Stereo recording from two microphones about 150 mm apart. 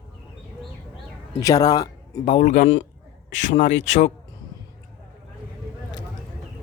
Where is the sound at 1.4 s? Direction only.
25° left (ahead or behind).